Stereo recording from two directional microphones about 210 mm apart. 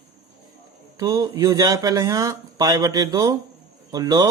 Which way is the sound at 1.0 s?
20° right (ahead or behind).